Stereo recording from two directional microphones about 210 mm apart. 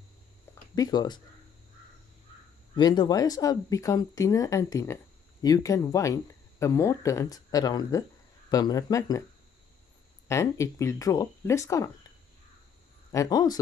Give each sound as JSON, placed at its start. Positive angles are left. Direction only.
{"t": 0.7, "sound": "speech", "side_deg": 20}
{"t": 2.7, "sound": "speech", "side_deg": 20}
{"t": 10.2, "sound": "speech", "side_deg": 15}
{"t": 13.1, "sound": "speech", "side_deg": 15}